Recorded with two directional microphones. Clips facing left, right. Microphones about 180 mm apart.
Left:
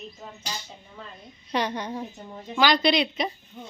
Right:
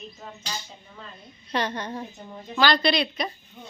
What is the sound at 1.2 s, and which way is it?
A woman's voice, 15° left (ahead or behind).